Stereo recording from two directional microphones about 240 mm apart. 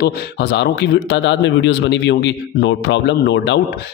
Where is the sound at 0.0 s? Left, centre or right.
Left.